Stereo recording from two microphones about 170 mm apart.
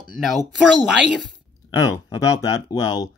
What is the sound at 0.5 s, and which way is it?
Speech, 5° right (ahead or behind).